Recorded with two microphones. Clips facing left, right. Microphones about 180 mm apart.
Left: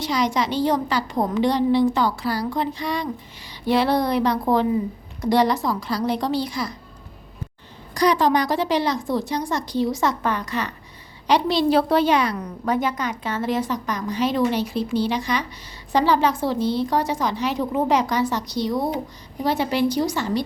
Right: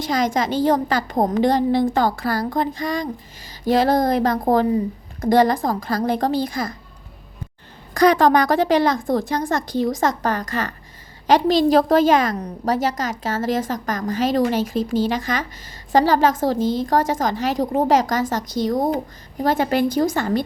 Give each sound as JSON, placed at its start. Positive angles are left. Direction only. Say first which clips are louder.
{"t": 0.0, "sound": "a woman's voice", "louder": "right 2 dB", "side_deg": -45}
{"t": 7.9, "sound": "a woman's voice", "louder": "right 4 dB", "side_deg": -50}